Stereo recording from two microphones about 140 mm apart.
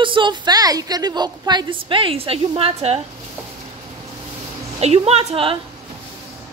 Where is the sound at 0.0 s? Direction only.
35° right (ahead or behind).